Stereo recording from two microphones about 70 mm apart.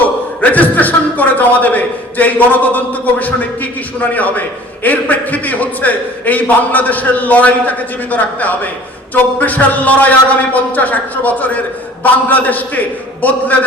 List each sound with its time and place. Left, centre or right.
0.0 s a man's voice: left